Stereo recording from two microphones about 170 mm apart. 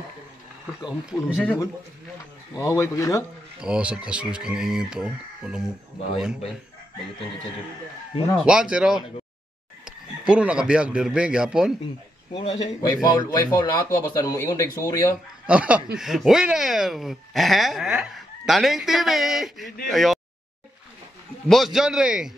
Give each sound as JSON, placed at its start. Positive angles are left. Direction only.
{"t": 1.1, "sound": "speech", "side_deg": -10}
{"t": 2.5, "sound": "speech", "side_deg": 20}
{"t": 3.6, "sound": "speech", "side_deg": -5}
{"t": 8.5, "sound": "speech", "side_deg": -5}
{"t": 12.3, "sound": "a man's voice", "side_deg": 30}
{"t": 15.4, "sound": "speech", "side_deg": -5}
{"t": 21.5, "sound": "speech", "side_deg": 0}